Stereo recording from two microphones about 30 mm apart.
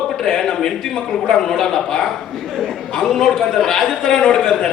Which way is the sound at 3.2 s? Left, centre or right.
Centre.